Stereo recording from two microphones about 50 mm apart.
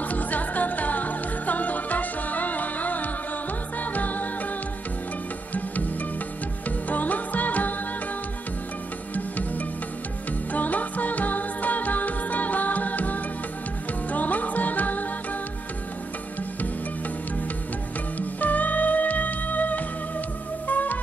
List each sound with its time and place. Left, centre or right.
0.1 s music: left
6.9 s music: left
9.1 s music: left
18.1 s music: left